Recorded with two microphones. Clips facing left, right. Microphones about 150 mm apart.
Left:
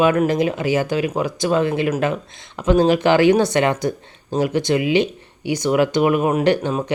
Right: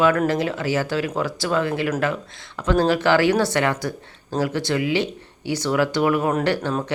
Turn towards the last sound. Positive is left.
turn(degrees=15)  # may be behind; listen again after turning